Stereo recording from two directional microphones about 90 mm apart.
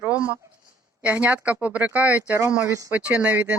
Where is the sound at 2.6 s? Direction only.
35° right (ahead or behind).